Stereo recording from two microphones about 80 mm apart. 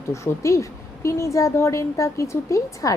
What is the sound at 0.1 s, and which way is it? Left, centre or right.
Speech, left.